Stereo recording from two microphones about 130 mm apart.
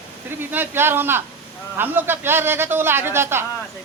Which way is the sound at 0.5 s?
15° right (ahead or behind).